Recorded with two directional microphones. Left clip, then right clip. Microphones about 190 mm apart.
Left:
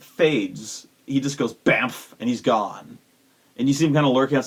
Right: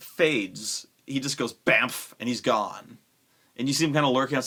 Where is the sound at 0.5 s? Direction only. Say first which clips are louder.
Right 3 dB; 10° right (ahead or behind).